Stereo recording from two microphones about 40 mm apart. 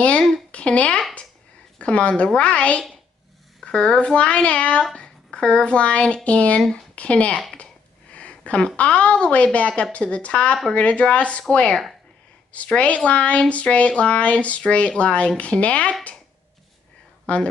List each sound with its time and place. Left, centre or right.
0.5 s a child's voice: left
7.5 s a sound: left
8.7 s speech: left
12.7 s speech: left
17.3 s speech: left